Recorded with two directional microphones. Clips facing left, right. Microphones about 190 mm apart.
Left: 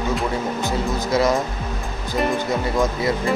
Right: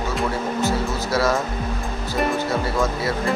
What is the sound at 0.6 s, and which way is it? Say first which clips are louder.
Speech: right 1 dB; 15° left (ahead or behind).